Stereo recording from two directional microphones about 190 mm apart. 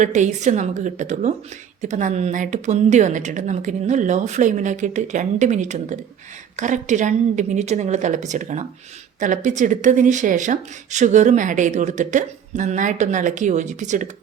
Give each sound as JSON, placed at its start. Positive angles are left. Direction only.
{"t": 0.0, "sound": "speech", "side_deg": -40}